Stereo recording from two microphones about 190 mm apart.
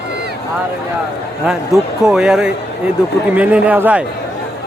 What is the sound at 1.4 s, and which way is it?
A man's voice, centre (ahead or behind).